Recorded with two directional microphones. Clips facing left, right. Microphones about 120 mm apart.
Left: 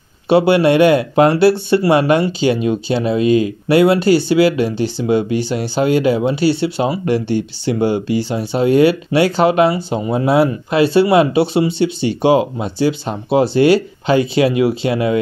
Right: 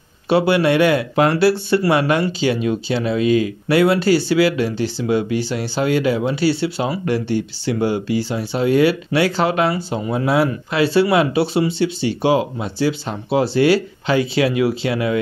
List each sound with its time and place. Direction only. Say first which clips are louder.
0.3 s speech: left 4 dB; 25° left (ahead or behind)